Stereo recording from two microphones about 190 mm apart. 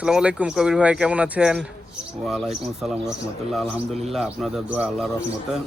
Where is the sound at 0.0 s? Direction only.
5° right (ahead or behind).